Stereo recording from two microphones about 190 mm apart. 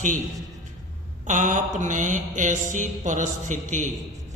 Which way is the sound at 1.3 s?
40° right (ahead or behind).